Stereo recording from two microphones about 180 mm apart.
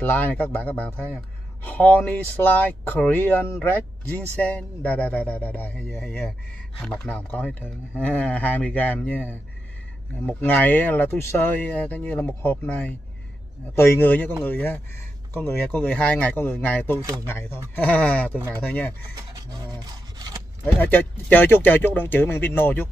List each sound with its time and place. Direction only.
0.0 s speech: 10° left (ahead or behind)
19.5 s rub: 20° right (ahead or behind)
20.6 s speech: 10° left (ahead or behind)